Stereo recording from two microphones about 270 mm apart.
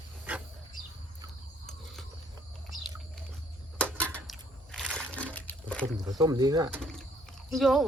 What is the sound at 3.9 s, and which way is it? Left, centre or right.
Trickle, centre.